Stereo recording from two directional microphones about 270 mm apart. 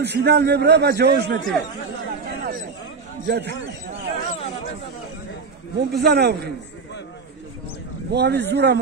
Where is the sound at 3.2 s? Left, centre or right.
Right.